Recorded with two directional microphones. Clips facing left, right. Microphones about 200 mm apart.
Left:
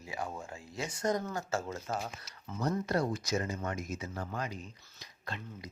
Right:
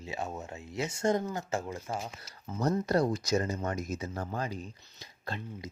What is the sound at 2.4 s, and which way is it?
Speech, 40° right (ahead or behind).